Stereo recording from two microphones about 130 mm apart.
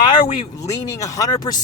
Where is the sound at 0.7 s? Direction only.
25° left (ahead or behind).